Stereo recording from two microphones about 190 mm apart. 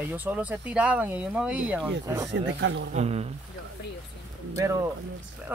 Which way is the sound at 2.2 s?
70° right (ahead or behind).